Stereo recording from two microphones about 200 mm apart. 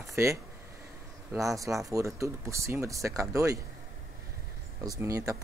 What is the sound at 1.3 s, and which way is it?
Speech, 15° right (ahead or behind).